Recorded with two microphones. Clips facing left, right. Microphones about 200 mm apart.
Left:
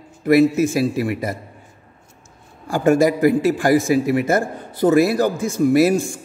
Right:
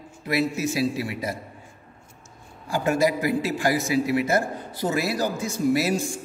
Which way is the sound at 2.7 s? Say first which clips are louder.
Left 7 dB; 50° left (ahead or behind).